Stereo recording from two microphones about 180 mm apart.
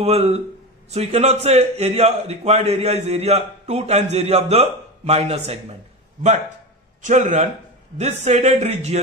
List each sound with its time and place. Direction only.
0.0 s a man's voice: 35° right (ahead or behind)
7.0 s a man's voice: 45° right (ahead or behind)